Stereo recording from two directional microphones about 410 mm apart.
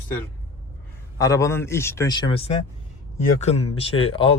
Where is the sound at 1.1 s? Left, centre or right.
Centre.